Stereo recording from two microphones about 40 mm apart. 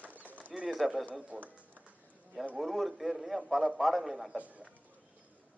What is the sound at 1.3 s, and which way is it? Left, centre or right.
Speech, right.